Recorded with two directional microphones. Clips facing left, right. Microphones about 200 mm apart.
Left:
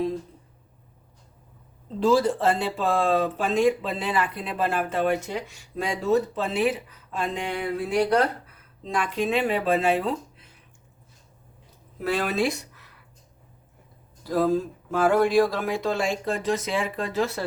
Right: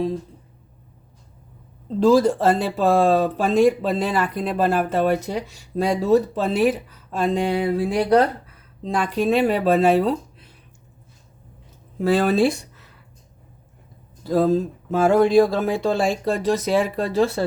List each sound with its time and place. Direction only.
2.0 s speech: 45° right (ahead or behind)
11.9 s speech: 30° right (ahead or behind)
14.3 s speech: 25° right (ahead or behind)